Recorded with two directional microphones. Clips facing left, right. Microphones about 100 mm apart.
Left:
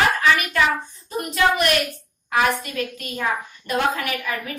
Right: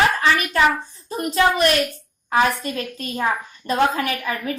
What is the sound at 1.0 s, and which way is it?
A woman's voice, 30° right (ahead or behind).